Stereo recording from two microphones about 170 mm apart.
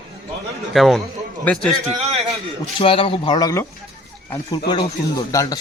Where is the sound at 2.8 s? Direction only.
30° left (ahead or behind).